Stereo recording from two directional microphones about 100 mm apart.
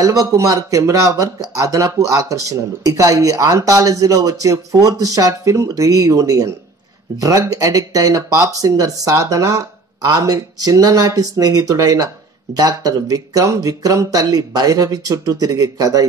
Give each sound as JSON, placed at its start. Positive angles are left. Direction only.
{"t": 0.0, "sound": "speech", "side_deg": -35}